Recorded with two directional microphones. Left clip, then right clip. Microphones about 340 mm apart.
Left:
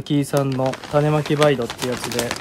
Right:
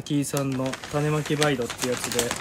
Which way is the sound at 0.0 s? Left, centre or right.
Left.